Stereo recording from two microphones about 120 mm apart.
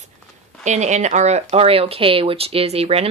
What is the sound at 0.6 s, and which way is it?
Speech, 75° right (ahead or behind).